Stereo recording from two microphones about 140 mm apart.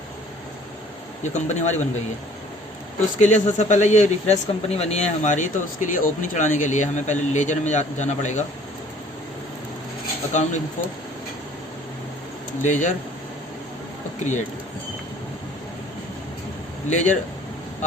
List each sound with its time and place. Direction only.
1.2 s speech: 55° left (ahead or behind)
3.2 s speech: 55° left (ahead or behind)
10.3 s speech: 60° left (ahead or behind)
12.6 s speech: 60° left (ahead or behind)
16.9 s speech: 60° left (ahead or behind)